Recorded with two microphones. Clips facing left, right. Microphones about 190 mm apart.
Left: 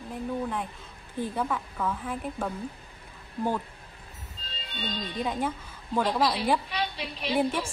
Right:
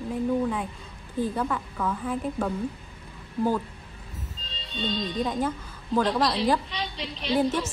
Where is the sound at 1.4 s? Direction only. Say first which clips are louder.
Right 1 dB; 5° left (ahead or behind).